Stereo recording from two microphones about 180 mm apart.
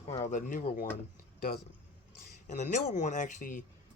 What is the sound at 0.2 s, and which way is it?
Speech, 45° left (ahead or behind).